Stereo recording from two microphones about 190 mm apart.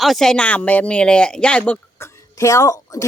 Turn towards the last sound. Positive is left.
turn(degrees=15)  # may be behind; listen again after turning